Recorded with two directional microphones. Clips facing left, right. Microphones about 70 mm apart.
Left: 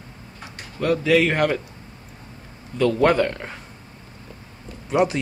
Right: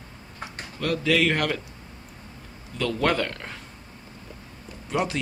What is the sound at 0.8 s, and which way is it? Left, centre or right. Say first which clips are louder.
Speech: left 5 dB; centre.